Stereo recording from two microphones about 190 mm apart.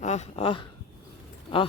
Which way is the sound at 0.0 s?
35° left (ahead or behind).